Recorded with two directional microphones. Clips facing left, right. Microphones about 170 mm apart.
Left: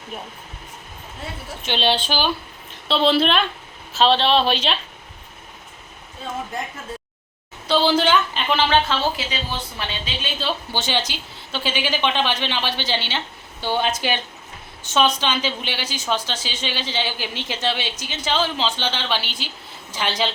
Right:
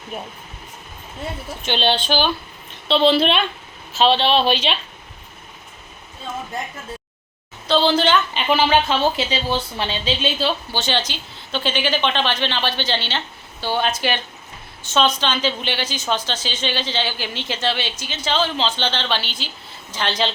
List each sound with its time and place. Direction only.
1.6 s a woman's voice: 5° left (ahead or behind)
7.7 s a woman's voice: 10° left (ahead or behind); by 9.0 s 10° right (ahead or behind)
9.1 s speech: 30° right (ahead or behind)
10.7 s a woman's voice: 15° left (ahead or behind)